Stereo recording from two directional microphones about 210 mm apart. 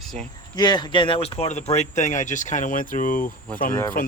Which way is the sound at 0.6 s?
20° left (ahead or behind).